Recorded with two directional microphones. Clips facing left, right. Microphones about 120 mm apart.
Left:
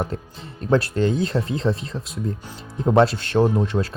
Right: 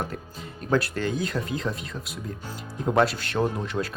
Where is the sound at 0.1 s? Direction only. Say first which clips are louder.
Left 4 dB; 25° left (ahead or behind).